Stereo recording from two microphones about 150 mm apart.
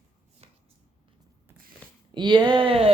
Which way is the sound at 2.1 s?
30° right (ahead or behind).